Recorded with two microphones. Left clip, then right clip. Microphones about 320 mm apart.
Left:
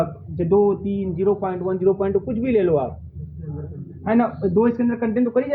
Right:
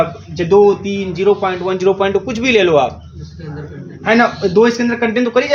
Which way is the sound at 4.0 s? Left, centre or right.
Centre.